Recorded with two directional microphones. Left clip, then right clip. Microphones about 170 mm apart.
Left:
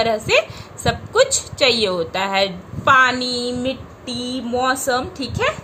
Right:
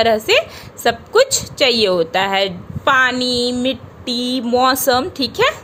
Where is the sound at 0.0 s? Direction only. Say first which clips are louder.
Right 3 dB; 40° right (ahead or behind).